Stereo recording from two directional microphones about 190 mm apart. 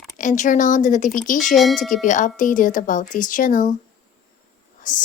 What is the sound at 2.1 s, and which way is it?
Speech, 40° left (ahead or behind).